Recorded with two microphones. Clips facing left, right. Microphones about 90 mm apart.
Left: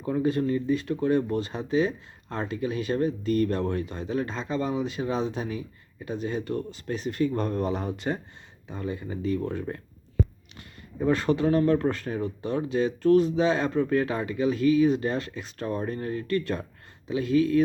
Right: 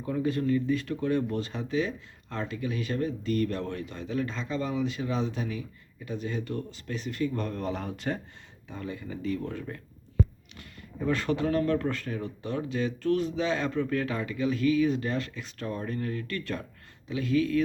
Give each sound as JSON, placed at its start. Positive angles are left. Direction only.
{"t": 0.0, "sound": "speech", "side_deg": 30}
{"t": 7.7, "sound": "speech", "side_deg": 15}